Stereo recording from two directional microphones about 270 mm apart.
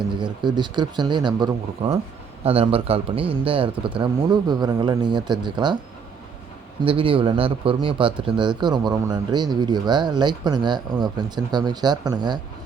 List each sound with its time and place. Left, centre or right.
0.1 s a man's voice: centre
6.8 s speech: centre